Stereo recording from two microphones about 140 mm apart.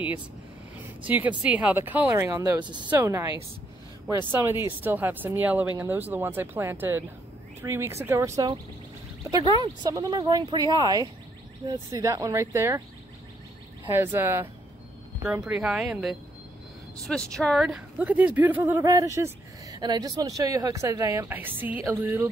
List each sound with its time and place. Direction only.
1.0 s a woman's voice: 10° right (ahead or behind)
2.6 s speech: 30° right (ahead or behind)
2.9 s a woman's voice: 15° right (ahead or behind)
4.3 s a woman's voice: 15° right (ahead or behind)
13.9 s a woman's voice: 15° right (ahead or behind)